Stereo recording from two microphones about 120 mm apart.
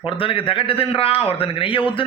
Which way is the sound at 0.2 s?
50° left (ahead or behind).